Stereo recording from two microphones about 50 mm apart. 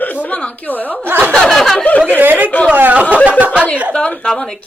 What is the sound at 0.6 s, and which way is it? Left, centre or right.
Speech, left.